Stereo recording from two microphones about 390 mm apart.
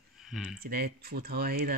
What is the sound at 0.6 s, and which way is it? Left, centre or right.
Speech, right.